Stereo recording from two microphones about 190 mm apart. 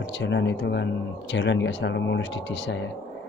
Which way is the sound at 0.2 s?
70° left (ahead or behind).